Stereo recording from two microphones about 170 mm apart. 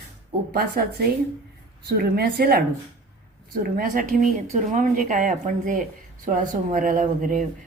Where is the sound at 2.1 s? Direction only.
65° right (ahead or behind).